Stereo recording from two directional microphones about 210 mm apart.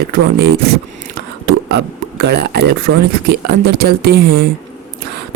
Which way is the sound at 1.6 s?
55° right (ahead or behind).